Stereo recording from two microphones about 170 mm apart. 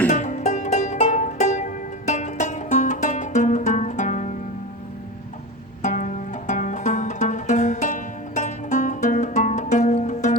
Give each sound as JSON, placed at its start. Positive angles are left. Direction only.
{"t": 0.1, "sound": "music", "side_deg": 45}
{"t": 5.8, "sound": "music", "side_deg": 45}